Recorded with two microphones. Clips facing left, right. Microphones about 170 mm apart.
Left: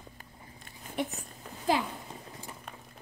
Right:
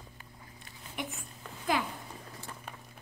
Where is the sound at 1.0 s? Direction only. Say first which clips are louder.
Left 6 dB; 35° left (ahead or behind).